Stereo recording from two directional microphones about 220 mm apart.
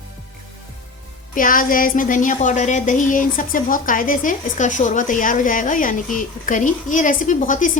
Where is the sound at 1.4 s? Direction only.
40° left (ahead or behind).